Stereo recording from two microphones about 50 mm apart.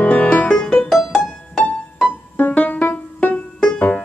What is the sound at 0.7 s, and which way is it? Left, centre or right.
Music, centre.